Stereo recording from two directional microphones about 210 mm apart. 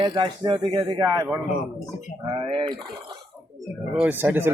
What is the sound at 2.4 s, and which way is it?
Speech, 25° right (ahead or behind).